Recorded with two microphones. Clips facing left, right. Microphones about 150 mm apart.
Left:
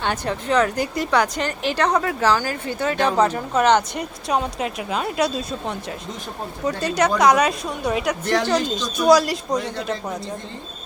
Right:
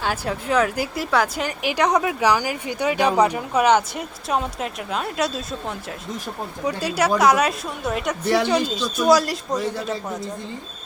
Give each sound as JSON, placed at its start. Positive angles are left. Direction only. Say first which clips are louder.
{"t": 0.0, "sound": "a woman's voice", "louder": "left 1 dB", "side_deg": -5}